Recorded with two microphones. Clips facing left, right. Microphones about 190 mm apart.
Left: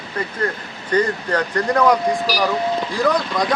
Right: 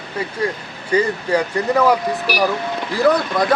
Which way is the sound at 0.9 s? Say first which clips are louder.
Right 2 dB; 10° right (ahead or behind).